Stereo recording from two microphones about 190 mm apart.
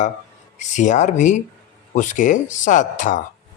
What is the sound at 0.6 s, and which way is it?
A man's voice, 40° left (ahead or behind).